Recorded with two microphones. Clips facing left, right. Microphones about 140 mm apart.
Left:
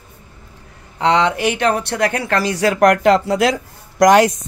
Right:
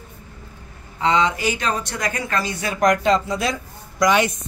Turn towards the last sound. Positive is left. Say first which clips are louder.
# left 7 dB
turn(degrees=90)